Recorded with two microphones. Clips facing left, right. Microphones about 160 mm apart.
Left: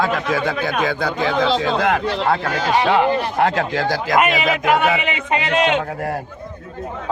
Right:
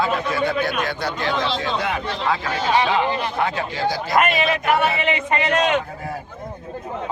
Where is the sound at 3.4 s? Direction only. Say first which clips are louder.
Left 4 dB; 80° left.